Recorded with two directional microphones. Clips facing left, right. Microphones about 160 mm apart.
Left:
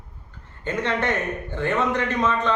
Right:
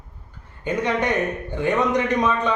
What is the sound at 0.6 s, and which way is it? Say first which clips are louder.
A man's voice: right 2 dB; 15° right (ahead or behind).